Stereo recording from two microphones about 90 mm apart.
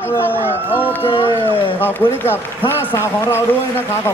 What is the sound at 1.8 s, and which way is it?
A man's voice, 25° left (ahead or behind).